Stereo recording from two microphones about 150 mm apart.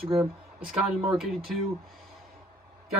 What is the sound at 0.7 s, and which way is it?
Speech, 5° right (ahead or behind).